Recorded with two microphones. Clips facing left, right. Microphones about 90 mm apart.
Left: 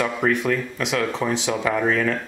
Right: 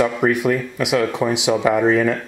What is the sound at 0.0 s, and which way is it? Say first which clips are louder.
Speech: right 4 dB; 10° right (ahead or behind).